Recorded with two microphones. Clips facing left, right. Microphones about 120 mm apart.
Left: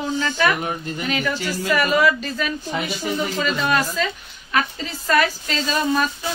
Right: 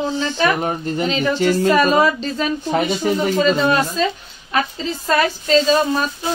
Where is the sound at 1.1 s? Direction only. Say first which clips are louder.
Right 2 dB; 20° right (ahead or behind).